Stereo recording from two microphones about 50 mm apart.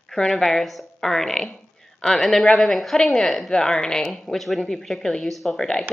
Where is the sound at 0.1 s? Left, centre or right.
Centre.